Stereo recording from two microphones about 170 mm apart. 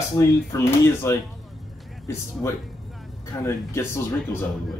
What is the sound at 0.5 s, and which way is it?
Speech, 20° left (ahead or behind).